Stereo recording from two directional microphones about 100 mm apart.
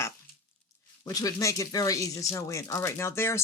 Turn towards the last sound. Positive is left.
turn(degrees=25)  # may be behind; listen again after turning